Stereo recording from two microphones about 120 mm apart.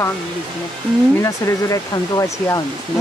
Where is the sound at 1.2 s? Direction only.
25° left (ahead or behind).